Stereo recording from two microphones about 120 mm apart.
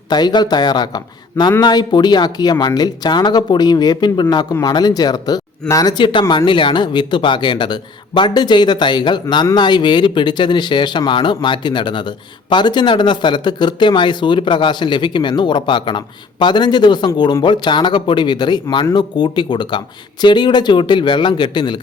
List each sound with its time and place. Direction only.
0.1 s speech: 35° left (ahead or behind)